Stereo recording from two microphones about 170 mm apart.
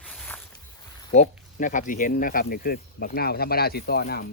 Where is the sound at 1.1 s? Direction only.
45° left (ahead or behind).